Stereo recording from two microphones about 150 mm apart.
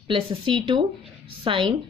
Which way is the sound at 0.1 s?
35° right (ahead or behind).